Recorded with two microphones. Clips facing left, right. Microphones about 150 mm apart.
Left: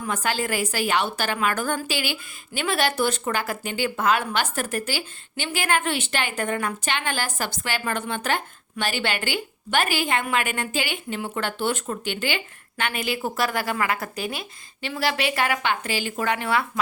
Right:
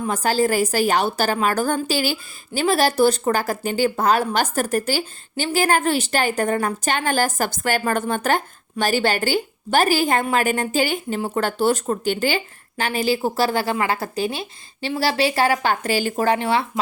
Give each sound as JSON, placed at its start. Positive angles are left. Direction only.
{"t": 0.0, "sound": "speech", "side_deg": -35}